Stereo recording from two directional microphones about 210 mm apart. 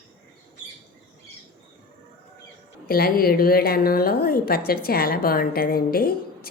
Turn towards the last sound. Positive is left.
turn(degrees=45)  # may be behind; listen again after turning